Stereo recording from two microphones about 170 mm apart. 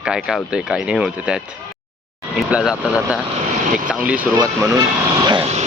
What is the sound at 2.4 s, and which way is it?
Speech, 5° right (ahead or behind).